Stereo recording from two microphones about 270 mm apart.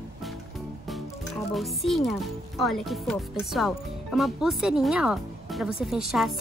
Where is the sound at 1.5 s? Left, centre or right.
Centre.